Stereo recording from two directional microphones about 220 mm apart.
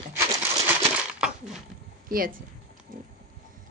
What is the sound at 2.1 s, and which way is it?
Speech, 40° right (ahead or behind).